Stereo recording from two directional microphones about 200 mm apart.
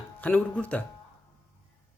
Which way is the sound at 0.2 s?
10° left (ahead or behind).